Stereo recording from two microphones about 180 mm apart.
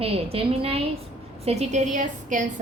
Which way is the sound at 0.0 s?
30° right (ahead or behind).